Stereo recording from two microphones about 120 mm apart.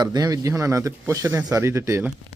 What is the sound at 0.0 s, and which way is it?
Speech, 35° right (ahead or behind).